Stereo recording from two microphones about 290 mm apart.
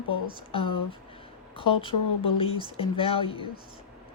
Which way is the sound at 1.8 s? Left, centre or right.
Centre.